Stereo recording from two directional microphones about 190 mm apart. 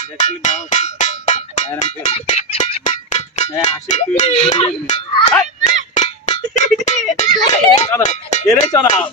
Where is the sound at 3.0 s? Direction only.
35° left (ahead or behind).